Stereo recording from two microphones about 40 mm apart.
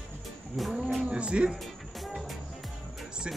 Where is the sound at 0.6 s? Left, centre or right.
Centre.